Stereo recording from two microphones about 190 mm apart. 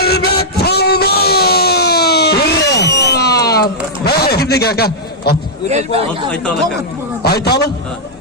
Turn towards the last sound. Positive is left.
turn(degrees=60)  # may be behind; listen again after turning